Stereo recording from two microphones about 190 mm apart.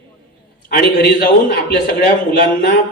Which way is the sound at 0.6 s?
50° left (ahead or behind).